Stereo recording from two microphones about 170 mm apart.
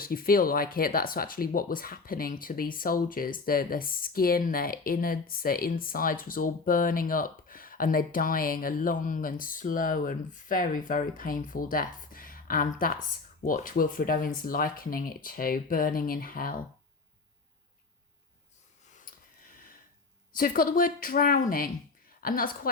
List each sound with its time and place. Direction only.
0.0 s speech: 60° left (ahead or behind)
20.3 s speech: 55° left (ahead or behind)